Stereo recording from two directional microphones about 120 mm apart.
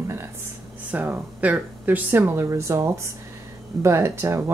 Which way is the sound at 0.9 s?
15° right (ahead or behind).